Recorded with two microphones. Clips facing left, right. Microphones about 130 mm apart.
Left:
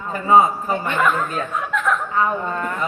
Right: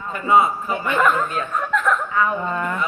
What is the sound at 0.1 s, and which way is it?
Speech, 40° left (ahead or behind).